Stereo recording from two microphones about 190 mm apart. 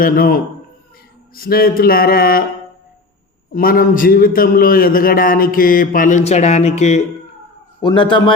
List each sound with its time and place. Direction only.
0.0 s a man's voice: 50° left (ahead or behind)
3.5 s a man's voice: 50° left (ahead or behind)
7.8 s a man's voice: 25° left (ahead or behind)